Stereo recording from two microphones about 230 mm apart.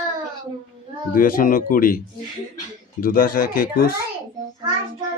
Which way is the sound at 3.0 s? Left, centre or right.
Left.